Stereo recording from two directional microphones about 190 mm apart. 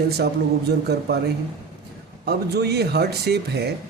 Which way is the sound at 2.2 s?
60° right (ahead or behind).